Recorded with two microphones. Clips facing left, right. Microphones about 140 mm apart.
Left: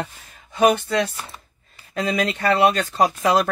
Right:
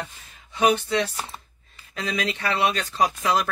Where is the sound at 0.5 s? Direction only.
50° left (ahead or behind).